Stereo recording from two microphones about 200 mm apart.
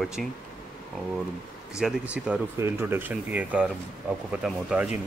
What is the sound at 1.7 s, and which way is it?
Speech, 5° right (ahead or behind).